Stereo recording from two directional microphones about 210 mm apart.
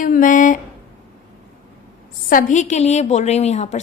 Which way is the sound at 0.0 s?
40° left (ahead or behind).